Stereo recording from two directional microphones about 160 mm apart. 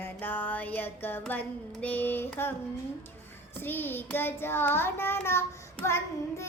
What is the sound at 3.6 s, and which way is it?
Child singing, 15° left (ahead or behind).